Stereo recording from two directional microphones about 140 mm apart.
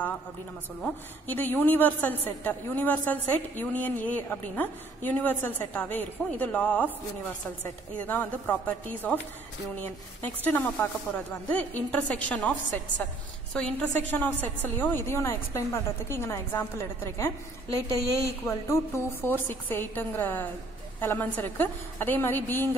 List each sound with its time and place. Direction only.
0.8 s a woman's voice: 15° left (ahead or behind)